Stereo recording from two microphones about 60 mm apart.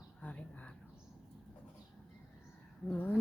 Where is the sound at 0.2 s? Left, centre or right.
Left.